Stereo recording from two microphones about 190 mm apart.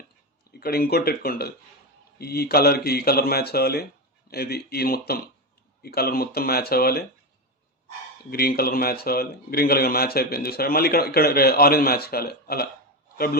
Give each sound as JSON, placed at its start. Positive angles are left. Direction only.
{"t": 0.6, "sound": "speech", "side_deg": 55}
{"t": 8.3, "sound": "speech", "side_deg": 50}